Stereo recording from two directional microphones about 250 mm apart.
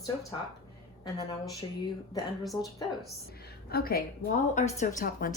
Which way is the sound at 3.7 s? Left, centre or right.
Left.